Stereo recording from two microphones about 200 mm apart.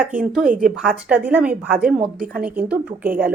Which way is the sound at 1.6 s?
45° right (ahead or behind).